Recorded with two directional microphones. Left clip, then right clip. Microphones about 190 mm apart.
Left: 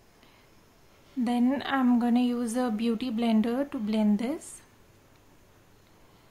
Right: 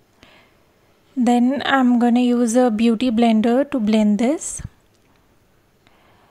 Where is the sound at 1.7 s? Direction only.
40° right (ahead or behind).